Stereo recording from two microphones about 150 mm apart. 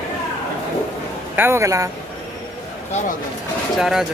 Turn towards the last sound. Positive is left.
turn(degrees=-5)  # may be behind; listen again after turning